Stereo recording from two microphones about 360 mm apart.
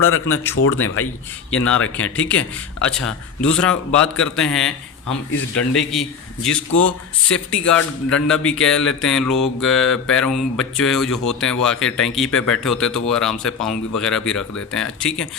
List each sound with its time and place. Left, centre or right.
0.5 s speech: left
2.0 s speech: centre
3.4 s speech: centre